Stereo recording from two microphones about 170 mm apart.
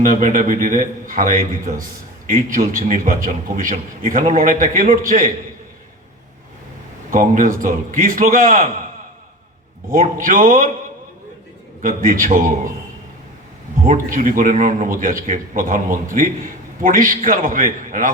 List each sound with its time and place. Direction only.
0.0 s a man's voice: 50° right (ahead or behind)
7.1 s a man's voice: 50° right (ahead or behind)
9.9 s a man's voice: 50° right (ahead or behind)
11.8 s a man's voice: 50° right (ahead or behind)
13.8 s a man's voice: 50° right (ahead or behind)